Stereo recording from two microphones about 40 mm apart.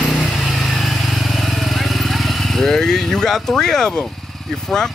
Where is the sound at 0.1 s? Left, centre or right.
Centre.